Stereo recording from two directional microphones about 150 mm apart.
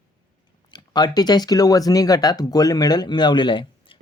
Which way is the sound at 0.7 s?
30° left (ahead or behind).